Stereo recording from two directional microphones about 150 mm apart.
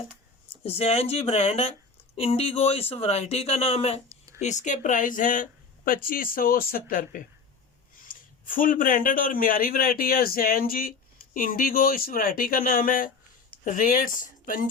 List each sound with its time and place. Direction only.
0.6 s speech: 40° left (ahead or behind)
4.4 s a man's voice: 50° left (ahead or behind)